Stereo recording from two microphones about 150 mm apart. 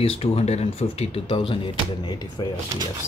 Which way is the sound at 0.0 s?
40° left (ahead or behind).